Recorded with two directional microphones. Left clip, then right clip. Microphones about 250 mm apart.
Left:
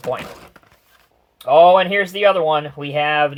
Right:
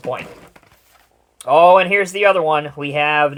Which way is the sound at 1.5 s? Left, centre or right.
Right.